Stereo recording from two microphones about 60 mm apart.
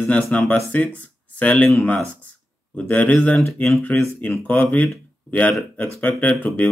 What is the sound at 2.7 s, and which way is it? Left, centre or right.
Speech, left.